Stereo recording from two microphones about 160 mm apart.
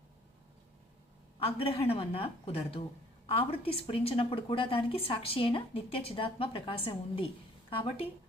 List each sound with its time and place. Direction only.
1.5 s a woman's voice: 35° left (ahead or behind)